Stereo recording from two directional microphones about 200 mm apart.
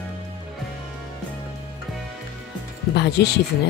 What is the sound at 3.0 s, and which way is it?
Speech, 55° left (ahead or behind).